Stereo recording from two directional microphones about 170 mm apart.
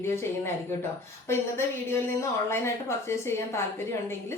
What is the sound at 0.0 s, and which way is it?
A woman's voice, 15° left (ahead or behind).